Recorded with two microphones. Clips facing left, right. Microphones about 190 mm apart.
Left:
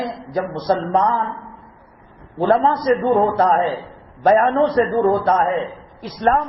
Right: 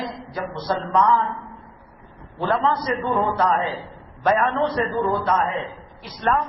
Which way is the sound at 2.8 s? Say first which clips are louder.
Left 7 dB; 45° left (ahead or behind).